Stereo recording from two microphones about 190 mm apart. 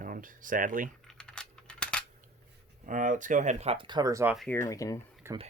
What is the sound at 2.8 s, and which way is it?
Speech, 45° right (ahead or behind).